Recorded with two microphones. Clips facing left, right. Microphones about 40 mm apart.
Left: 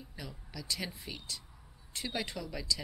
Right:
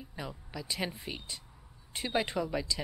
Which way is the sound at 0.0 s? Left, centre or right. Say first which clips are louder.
Right 5 dB; right.